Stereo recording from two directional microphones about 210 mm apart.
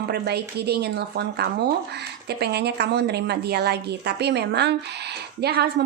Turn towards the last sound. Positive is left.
turn(degrees=-50)  # may be behind; listen again after turning